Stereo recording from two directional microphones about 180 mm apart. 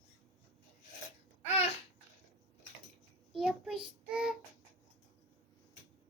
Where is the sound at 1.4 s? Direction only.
35° left (ahead or behind).